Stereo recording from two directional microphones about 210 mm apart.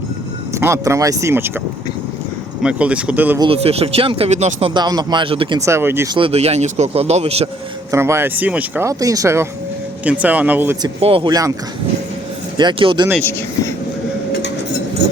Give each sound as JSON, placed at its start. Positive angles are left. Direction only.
{"t": 0.5, "sound": "speech", "side_deg": -15}
{"t": 2.6, "sound": "speech", "side_deg": -5}
{"t": 3.4, "sound": "speech", "side_deg": -25}
{"t": 6.1, "sound": "speech", "side_deg": -25}
{"t": 7.9, "sound": "speech", "side_deg": -10}
{"t": 11.0, "sound": "speech", "side_deg": -25}
{"t": 12.5, "sound": "speech", "side_deg": -20}